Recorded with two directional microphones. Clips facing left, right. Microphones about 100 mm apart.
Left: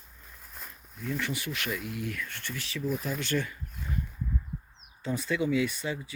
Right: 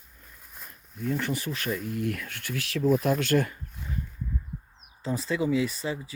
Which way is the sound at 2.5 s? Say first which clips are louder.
Right 8 dB; 75° right (ahead or behind).